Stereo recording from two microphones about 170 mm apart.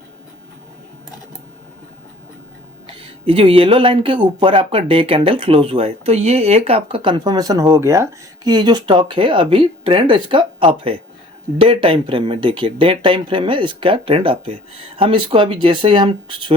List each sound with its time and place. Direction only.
2.8 s speech: 30° right (ahead or behind)